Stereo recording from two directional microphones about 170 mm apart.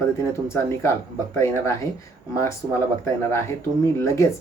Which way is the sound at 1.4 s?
15° left (ahead or behind).